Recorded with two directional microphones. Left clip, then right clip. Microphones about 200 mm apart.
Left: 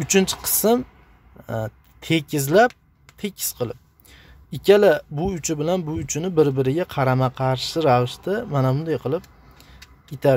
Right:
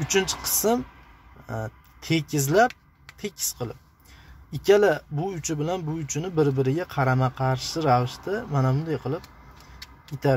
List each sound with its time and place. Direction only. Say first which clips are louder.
0.0 s speech: left 4 dB; 35° left (ahead or behind)